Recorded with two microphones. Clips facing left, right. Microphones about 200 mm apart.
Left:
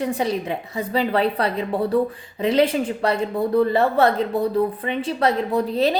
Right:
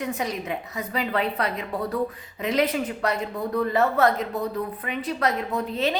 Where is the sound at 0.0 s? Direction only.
30° left (ahead or behind).